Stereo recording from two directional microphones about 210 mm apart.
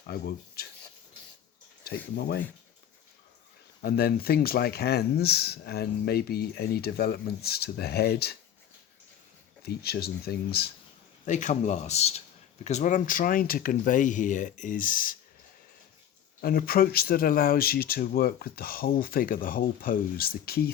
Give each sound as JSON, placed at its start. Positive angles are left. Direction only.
{"t": 0.1, "sound": "speech", "side_deg": 50}
{"t": 2.1, "sound": "speech", "side_deg": 50}
{"t": 3.8, "sound": "speech", "side_deg": 45}
{"t": 9.6, "sound": "speech", "side_deg": 50}
{"t": 11.3, "sound": "speech", "side_deg": 35}
{"t": 16.4, "sound": "speech", "side_deg": 45}